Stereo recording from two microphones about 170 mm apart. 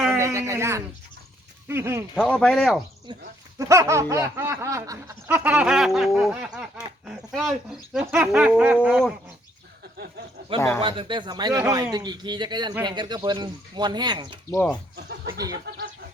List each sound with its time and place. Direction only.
0.2 s a sound: 15° right (ahead or behind)
1.6 s speech: 15° right (ahead or behind)
2.1 s speech: 5° left (ahead or behind)
3.1 s speech: 30° right (ahead or behind)
3.6 s baby laughter: 20° right (ahead or behind)
4.6 s speech: 20° right (ahead or behind)
5.4 s speech: 5° right (ahead or behind)
10.8 s speech: 30° right (ahead or behind)
14.5 s speech: 20° left (ahead or behind)
14.9 s speech: 70° right (ahead or behind)